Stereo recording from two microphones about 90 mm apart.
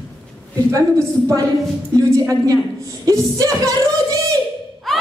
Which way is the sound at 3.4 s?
40° right (ahead or behind).